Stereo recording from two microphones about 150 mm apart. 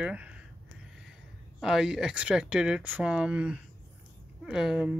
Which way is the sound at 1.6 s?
5° right (ahead or behind).